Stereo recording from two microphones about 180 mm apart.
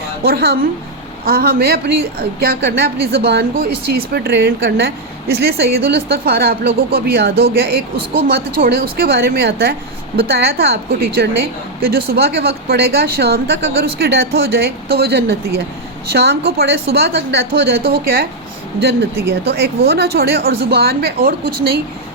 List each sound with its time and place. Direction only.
0.2 s a woman's voice: 60° right (ahead or behind)
19.3 s a woman's voice: 60° right (ahead or behind)